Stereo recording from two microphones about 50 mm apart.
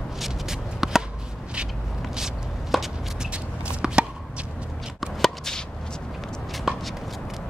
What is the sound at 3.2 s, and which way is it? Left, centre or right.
Chopping, centre.